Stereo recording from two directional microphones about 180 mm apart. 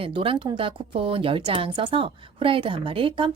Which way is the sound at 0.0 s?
30° right (ahead or behind).